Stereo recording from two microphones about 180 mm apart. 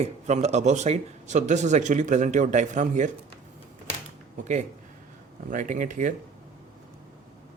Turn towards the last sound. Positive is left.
turn(degrees=-45)  # may be behind; listen again after turning